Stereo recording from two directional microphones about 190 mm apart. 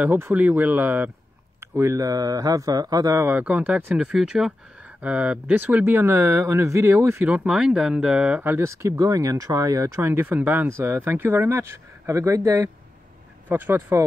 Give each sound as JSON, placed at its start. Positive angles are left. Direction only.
{"t": 0.0, "sound": "speech", "side_deg": -10}